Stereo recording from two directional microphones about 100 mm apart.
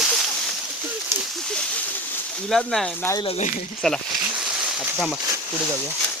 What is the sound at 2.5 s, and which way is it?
Speech, 5° left (ahead or behind).